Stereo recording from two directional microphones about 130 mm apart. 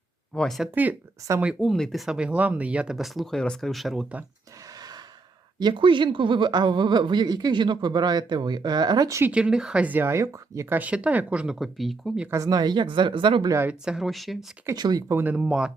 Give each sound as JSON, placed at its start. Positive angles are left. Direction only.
{"t": 0.3, "sound": "speech", "side_deg": 0}
{"t": 0.7, "sound": "speech", "side_deg": -15}
{"t": 4.6, "sound": "gasp", "side_deg": -30}
{"t": 5.5, "sound": "speech", "side_deg": -35}
{"t": 9.3, "sound": "speech", "side_deg": -5}
{"t": 12.3, "sound": "speech", "side_deg": -30}
{"t": 13.7, "sound": "speech", "side_deg": -5}
{"t": 14.8, "sound": "speech", "side_deg": -35}
{"t": 15.0, "sound": "speech", "side_deg": -15}